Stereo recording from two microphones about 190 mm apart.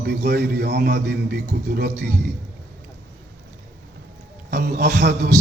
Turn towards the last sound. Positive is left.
turn(degrees=-60)  # may be behind; listen again after turning